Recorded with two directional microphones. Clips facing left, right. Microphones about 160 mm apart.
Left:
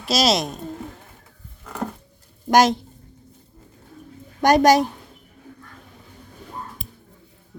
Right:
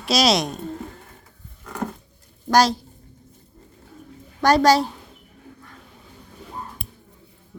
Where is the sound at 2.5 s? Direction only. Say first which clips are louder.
Left 2 dB; 20° left (ahead or behind).